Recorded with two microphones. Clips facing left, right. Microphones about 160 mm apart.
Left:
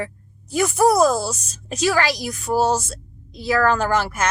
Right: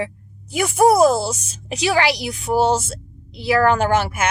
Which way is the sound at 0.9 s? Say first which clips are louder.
Right 3 dB; 10° right (ahead or behind).